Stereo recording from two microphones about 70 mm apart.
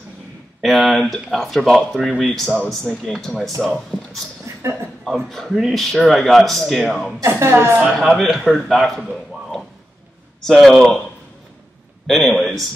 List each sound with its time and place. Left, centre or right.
0.6 s a man's voice: centre
7.2 s speech: right
8.0 s a man's voice: centre
10.4 s a man's voice: centre
12.1 s a man's voice: centre